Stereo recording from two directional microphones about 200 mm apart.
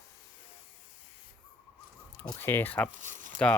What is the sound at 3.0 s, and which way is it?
Speech, 40° right (ahead or behind).